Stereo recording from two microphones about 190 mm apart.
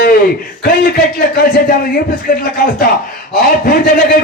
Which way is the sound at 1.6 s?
50° left (ahead or behind).